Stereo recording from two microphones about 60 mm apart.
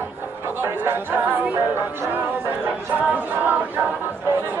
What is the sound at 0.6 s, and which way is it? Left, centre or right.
Speech, right.